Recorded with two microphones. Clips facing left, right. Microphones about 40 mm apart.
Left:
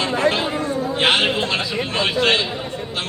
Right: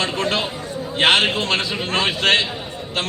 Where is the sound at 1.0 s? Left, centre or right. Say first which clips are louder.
Right 2 dB; right.